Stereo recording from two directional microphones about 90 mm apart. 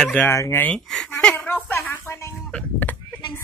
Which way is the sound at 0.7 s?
5° left (ahead or behind).